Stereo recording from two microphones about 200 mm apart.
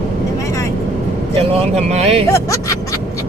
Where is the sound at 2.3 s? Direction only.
15° left (ahead or behind).